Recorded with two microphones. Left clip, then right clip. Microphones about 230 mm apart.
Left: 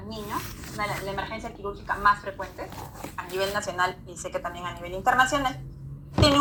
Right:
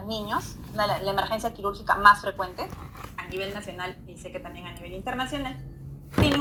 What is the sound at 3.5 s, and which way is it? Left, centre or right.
A woman's voice, centre.